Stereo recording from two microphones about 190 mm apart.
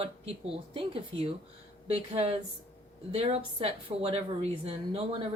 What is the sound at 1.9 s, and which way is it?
A woman's voice, 35° right (ahead or behind).